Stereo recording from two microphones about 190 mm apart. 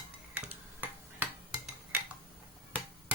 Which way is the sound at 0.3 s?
10° right (ahead or behind).